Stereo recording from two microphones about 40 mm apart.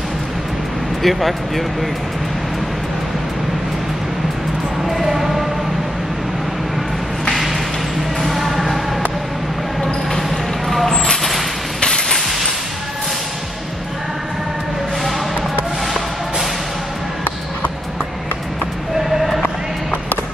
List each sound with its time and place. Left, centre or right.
1.0 s speech: centre
4.8 s basketball bounce: centre
8.2 s music: centre
10.7 s vehicle: centre
11.8 s music: centre
19.4 s music: left